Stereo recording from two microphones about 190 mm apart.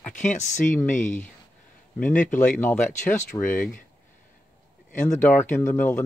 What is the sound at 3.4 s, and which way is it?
Speech, 45° left (ahead or behind).